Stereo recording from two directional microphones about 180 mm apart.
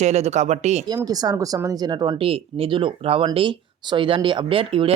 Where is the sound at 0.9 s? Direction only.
20° right (ahead or behind).